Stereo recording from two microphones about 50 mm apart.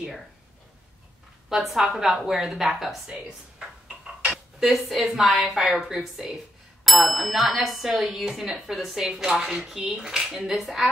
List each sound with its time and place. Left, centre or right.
1.5 s speech: centre
4.3 s speech: centre